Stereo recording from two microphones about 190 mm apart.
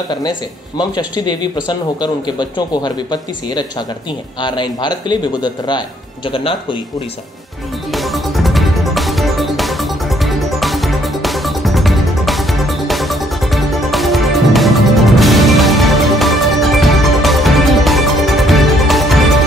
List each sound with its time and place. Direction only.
0.1 s speech: 25° left (ahead or behind)
7.9 s music: centre (ahead or behind)